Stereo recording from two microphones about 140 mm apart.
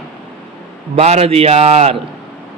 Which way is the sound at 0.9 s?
50° right (ahead or behind).